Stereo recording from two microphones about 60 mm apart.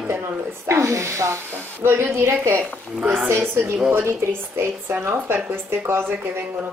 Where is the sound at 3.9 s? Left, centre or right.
Right.